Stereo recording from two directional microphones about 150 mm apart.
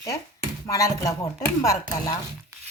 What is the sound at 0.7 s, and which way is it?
Speech, 25° left (ahead or behind).